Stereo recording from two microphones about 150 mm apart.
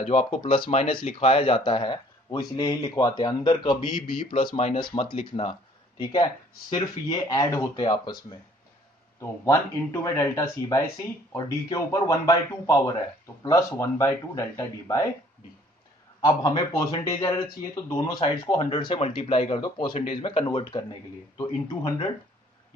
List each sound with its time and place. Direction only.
0.0 s speech: 50° left (ahead or behind)
0.4 s speech: 35° left (ahead or behind)
9.4 s speech: 20° left (ahead or behind)
16.3 s speech: 25° left (ahead or behind)
21.4 s speech: 25° left (ahead or behind)